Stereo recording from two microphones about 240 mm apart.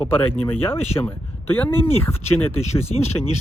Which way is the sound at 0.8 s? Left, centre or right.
Left.